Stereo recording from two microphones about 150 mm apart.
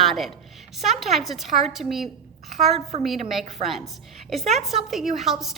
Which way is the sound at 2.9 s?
45° right (ahead or behind).